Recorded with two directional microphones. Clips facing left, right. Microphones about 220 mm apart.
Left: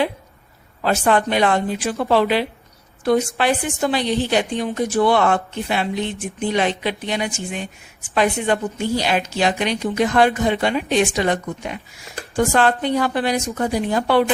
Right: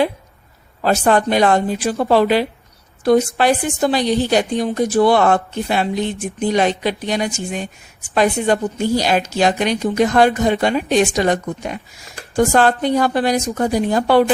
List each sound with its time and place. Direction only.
0.8 s a woman's voice: 40° right (ahead or behind)